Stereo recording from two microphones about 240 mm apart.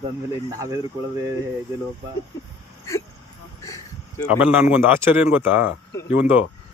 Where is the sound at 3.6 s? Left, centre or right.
Centre.